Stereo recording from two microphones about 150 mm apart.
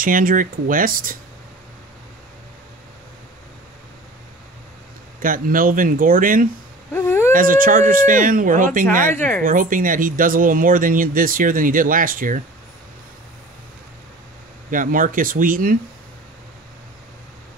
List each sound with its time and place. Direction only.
0.0 s speech: 65° right (ahead or behind)
5.2 s speech: 70° right (ahead or behind)
6.9 s a sound: 15° left (ahead or behind)
7.3 s speech: 65° right (ahead or behind)
14.7 s speech: 65° right (ahead or behind)